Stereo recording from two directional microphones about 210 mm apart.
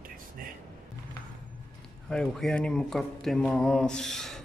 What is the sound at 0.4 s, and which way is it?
Music, 40° right (ahead or behind).